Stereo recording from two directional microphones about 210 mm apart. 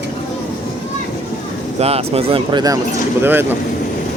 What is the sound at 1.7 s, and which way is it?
Speech, 30° right (ahead or behind).